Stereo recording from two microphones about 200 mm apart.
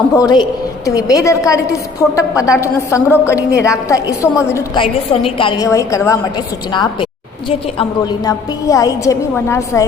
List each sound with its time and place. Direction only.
0.2 s a woman's voice: 20° left (ahead or behind)
7.8 s a woman's voice: 20° left (ahead or behind)